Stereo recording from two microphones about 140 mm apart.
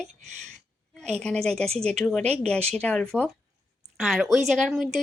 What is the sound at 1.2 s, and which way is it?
Speech, 5° left (ahead or behind).